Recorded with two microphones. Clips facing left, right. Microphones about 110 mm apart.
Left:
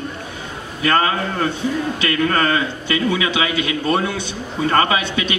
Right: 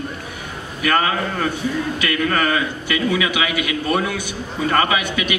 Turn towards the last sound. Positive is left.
turn(degrees=25)  # may be behind; listen again after turning